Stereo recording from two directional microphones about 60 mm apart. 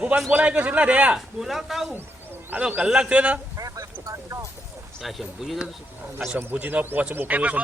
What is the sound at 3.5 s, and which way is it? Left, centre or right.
Speech, right.